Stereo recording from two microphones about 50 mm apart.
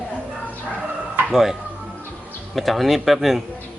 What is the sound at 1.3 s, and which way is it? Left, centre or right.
Speech, centre.